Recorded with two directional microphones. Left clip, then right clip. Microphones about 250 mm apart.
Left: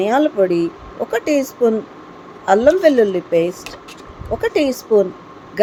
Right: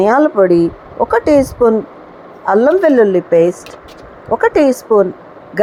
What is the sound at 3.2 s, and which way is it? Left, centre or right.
Speech, right.